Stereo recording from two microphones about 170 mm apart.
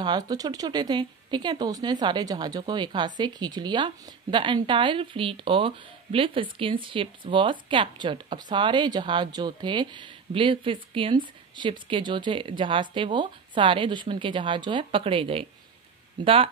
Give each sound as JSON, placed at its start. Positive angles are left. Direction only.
{"t": 0.0, "sound": "speech", "side_deg": -25}